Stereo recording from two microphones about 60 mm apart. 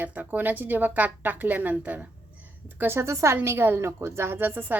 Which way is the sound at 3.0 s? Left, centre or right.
Right.